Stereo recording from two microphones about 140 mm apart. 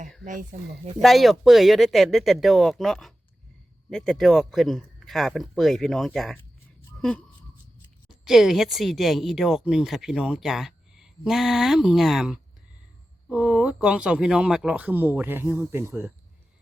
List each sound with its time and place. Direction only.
0.5 s speech: 65° right (ahead or behind)
1.0 s speech: centre (ahead or behind)
8.2 s speech: centre (ahead or behind)